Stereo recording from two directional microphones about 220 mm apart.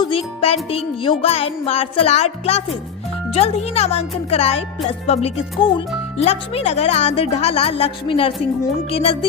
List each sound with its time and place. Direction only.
0.0 s music: 25° left (ahead or behind)
1.2 s speech: 25° left (ahead or behind)